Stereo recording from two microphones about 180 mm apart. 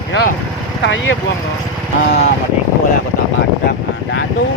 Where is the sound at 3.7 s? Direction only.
75° left (ahead or behind).